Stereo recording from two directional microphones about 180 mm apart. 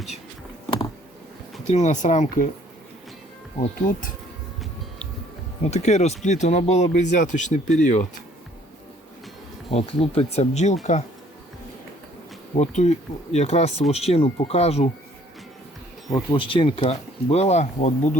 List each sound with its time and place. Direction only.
1.6 s speech: 40° left (ahead or behind)
3.6 s speech: 50° left (ahead or behind)
5.7 s speech: 40° left (ahead or behind)
9.7 s speech: 35° left (ahead or behind)
12.5 s speech: 40° left (ahead or behind)
16.0 s speech: 25° left (ahead or behind); by 18.2 s 40° left (ahead or behind)